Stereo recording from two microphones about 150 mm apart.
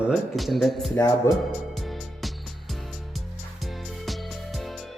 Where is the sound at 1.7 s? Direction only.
Centre (ahead or behind).